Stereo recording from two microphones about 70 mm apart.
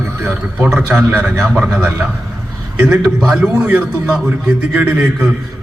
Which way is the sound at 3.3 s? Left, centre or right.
Right.